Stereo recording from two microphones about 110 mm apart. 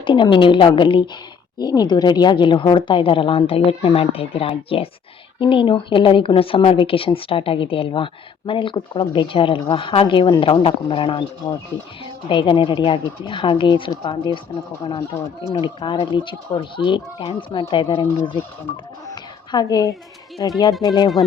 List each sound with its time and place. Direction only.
0.0 s speech: 50° left (ahead or behind)
19.0 s a sound: 40° left (ahead or behind)
20.4 s speech: 35° left (ahead or behind)